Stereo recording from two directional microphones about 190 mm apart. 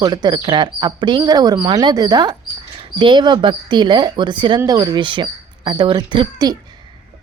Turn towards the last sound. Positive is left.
turn(degrees=-25)  # may be behind; listen again after turning